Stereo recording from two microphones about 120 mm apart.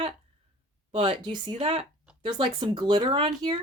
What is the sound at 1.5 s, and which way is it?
Speech, 55° right (ahead or behind).